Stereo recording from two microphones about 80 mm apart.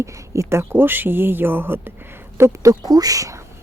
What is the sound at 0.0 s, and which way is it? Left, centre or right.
Speech, right.